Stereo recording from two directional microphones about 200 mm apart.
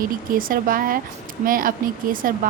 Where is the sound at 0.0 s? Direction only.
45° right (ahead or behind).